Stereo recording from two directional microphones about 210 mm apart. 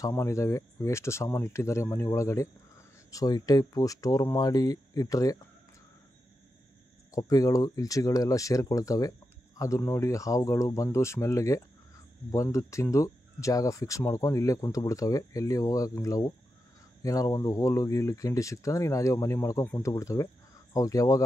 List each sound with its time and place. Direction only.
0.0 s speech: 15° left (ahead or behind)
7.1 s speech: 15° left (ahead or behind)